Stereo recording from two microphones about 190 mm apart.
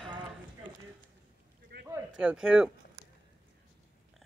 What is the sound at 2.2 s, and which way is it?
Speech, 5° right (ahead or behind).